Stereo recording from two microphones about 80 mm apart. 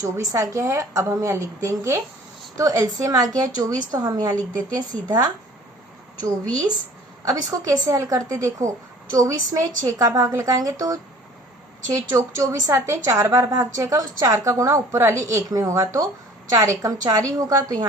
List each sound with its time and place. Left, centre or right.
0.0 s a woman's voice: right
7.3 s a woman's voice: right